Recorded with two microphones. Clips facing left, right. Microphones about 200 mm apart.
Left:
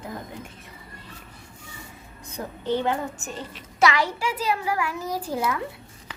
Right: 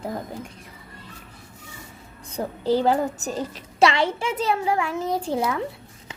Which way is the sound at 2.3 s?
35° right (ahead or behind).